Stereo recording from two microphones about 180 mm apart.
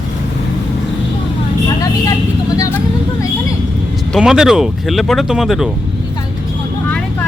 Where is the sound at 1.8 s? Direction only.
20° left (ahead or behind).